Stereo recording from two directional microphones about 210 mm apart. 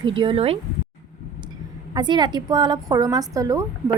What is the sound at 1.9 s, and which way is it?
A woman's voice, 20° right (ahead or behind).